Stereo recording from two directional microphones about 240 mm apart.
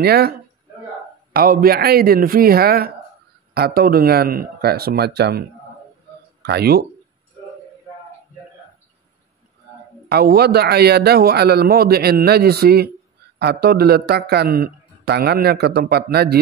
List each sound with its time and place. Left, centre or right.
0.0 s a man's voice: right
6.4 s a man's voice: right
10.0 s a man's voice: right